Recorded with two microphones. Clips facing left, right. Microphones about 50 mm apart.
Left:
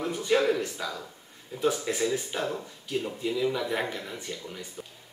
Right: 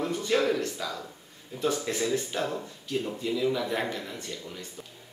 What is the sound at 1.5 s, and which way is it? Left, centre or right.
A man's voice, centre.